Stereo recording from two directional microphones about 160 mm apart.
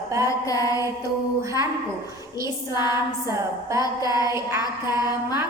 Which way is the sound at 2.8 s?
25° left (ahead or behind).